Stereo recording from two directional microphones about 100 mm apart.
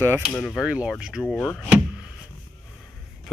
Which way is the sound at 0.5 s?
10° right (ahead or behind).